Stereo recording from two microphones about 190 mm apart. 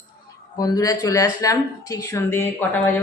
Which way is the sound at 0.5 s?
20° left (ahead or behind).